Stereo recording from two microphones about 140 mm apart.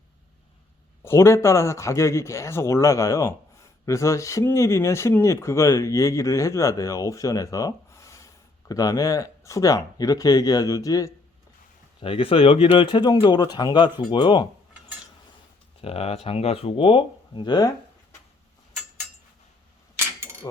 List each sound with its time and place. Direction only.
1.0 s speech: 20° left (ahead or behind)
11.9 s speech: 40° left (ahead or behind)
15.8 s speech: 45° left (ahead or behind)